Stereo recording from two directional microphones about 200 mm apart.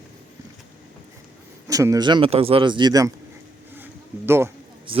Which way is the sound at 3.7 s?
10° right (ahead or behind).